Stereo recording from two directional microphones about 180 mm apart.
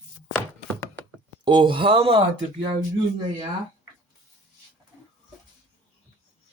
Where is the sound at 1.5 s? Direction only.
25° right (ahead or behind).